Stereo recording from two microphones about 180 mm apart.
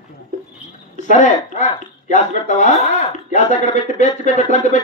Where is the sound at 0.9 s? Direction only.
45° left (ahead or behind).